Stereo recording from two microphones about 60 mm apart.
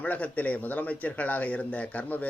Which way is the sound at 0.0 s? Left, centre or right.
Left.